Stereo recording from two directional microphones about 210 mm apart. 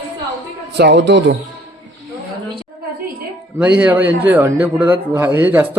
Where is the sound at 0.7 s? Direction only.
55° right (ahead or behind).